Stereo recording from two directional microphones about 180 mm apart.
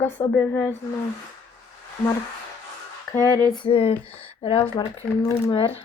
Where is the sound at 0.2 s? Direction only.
15° left (ahead or behind).